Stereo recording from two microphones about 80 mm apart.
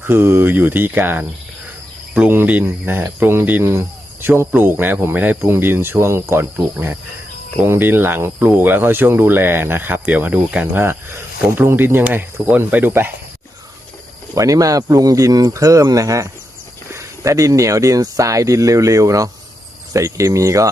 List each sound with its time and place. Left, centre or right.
0.1 s speech: right
2.3 s speech: right
10.8 s speech: right
14.3 s speech: right